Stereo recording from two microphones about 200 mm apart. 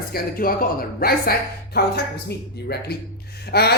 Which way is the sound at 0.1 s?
45° left (ahead or behind).